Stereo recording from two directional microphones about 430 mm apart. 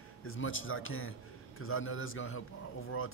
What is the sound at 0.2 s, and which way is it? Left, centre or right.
Speech, left.